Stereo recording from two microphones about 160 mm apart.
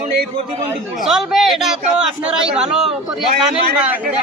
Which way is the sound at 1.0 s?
Centre (ahead or behind).